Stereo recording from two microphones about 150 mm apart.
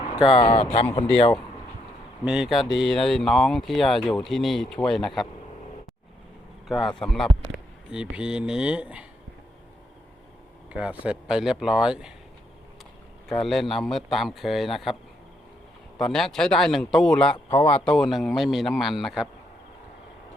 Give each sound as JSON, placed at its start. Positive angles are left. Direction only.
{"t": 0.2, "sound": "speech", "side_deg": 35}
{"t": 2.2, "sound": "speech", "side_deg": -5}
{"t": 6.7, "sound": "speech", "side_deg": 0}
{"t": 10.7, "sound": "speech", "side_deg": -10}
{"t": 13.2, "sound": "speech", "side_deg": 0}
{"t": 16.0, "sound": "speech", "side_deg": 0}
{"t": 17.3, "sound": "speech", "side_deg": 35}
{"t": 17.7, "sound": "speech", "side_deg": 5}